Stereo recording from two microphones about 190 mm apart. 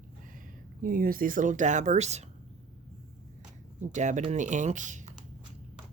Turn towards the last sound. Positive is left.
turn(degrees=-40)  # may be behind; listen again after turning